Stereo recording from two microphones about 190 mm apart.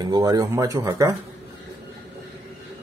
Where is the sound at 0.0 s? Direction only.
20° right (ahead or behind).